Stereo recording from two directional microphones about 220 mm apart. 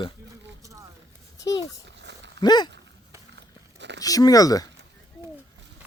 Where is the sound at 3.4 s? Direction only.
55° right (ahead or behind).